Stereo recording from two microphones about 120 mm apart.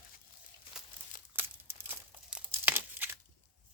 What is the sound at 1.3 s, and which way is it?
Crumpling, 15° right (ahead or behind).